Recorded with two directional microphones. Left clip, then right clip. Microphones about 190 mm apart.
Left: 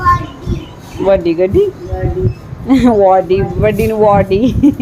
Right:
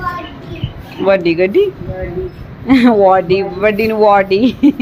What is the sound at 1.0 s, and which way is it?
Speech, 10° left (ahead or behind).